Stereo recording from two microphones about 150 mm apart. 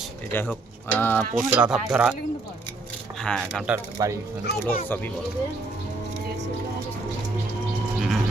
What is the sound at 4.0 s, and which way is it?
Speech, 25° right (ahead or behind).